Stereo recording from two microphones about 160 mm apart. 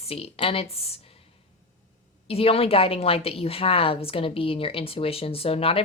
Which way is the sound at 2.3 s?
35° left (ahead or behind).